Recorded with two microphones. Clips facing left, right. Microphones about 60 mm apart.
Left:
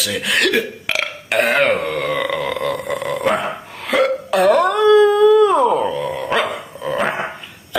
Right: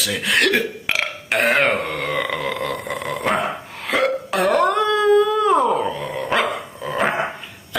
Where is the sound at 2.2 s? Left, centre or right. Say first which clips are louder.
Left 3 dB; right.